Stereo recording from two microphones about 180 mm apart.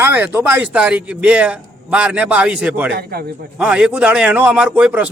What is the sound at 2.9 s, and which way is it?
Speech, 60° right (ahead or behind).